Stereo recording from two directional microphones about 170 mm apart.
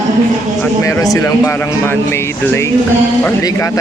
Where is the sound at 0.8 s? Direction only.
20° left (ahead or behind).